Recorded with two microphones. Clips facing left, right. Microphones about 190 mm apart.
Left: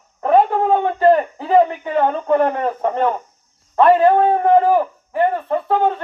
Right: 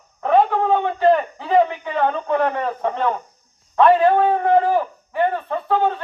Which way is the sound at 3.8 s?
35° left (ahead or behind).